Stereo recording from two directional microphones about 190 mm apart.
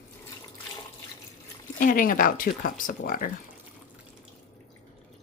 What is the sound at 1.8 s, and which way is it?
Speech, 45° left (ahead or behind).